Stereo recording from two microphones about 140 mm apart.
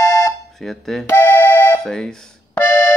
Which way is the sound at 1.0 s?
15° left (ahead or behind).